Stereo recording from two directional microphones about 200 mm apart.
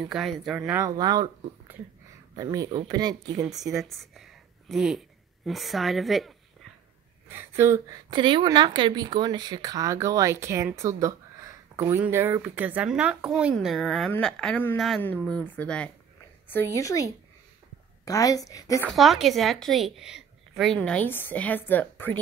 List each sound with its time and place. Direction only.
0.1 s a woman's voice: centre (ahead or behind); by 1.3 s 20° right (ahead or behind)
2.3 s speech: 20° right (ahead or behind)
3.4 s speech: centre (ahead or behind)
7.2 s a woman's voice: 10° right (ahead or behind); by 18.9 s 15° left (ahead or behind)
18.9 s a woman's voice: centre (ahead or behind)